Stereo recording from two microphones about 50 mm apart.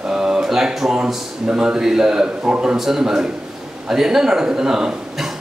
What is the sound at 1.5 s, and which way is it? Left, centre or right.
A man's voice, centre.